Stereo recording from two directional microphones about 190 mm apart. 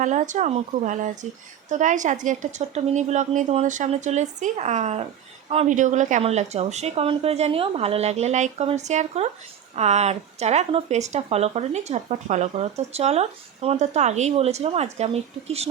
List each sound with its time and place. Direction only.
0.0 s speech: 40° right (ahead or behind)